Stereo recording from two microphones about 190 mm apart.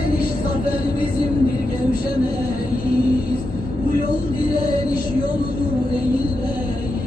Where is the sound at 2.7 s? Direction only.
50° left (ahead or behind).